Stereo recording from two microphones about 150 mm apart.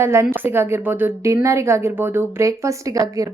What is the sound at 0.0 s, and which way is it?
A woman's voice, 15° right (ahead or behind).